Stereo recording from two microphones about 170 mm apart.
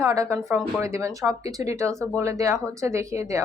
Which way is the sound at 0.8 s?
20° right (ahead or behind).